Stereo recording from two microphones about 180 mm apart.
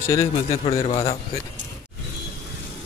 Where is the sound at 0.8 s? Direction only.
35° left (ahead or behind).